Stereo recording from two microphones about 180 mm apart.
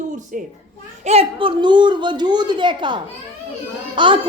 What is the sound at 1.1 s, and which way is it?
Speech, 30° right (ahead or behind).